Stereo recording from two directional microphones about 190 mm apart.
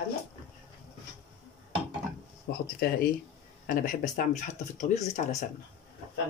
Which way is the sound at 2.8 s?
55° left (ahead or behind).